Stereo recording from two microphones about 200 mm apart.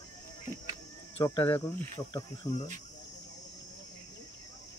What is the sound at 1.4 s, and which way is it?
Speech, 10° left (ahead or behind).